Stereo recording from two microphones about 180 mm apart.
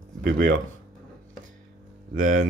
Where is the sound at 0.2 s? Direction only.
55° right (ahead or behind).